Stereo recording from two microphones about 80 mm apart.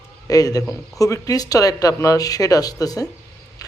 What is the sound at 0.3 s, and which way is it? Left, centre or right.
A man's voice, left.